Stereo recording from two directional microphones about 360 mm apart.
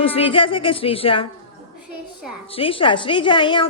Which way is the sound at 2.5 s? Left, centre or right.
Centre.